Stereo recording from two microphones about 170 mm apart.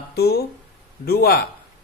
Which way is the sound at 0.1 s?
70° left (ahead or behind).